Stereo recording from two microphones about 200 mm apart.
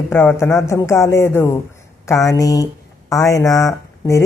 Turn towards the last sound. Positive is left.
turn(degrees=15)  # may be behind; listen again after turning